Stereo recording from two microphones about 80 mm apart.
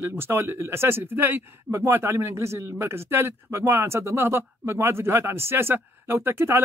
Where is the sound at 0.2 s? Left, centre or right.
Right.